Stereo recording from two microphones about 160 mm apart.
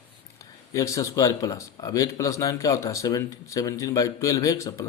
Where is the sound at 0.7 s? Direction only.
20° left (ahead or behind).